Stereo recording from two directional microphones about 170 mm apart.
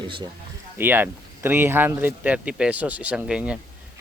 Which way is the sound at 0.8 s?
10° right (ahead or behind).